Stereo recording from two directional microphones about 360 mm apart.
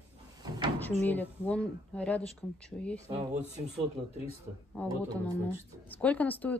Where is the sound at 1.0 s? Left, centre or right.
Centre.